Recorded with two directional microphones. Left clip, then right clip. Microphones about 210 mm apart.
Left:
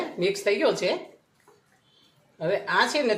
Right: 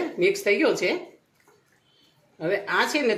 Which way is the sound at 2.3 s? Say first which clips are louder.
Even; 25° right (ahead or behind).